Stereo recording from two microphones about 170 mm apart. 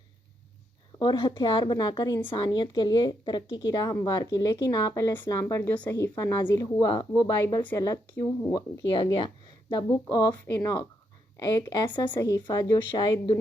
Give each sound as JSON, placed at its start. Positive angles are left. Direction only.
{"t": 0.9, "sound": "a woman's voice", "side_deg": 25}
{"t": 7.4, "sound": "a woman's voice", "side_deg": 15}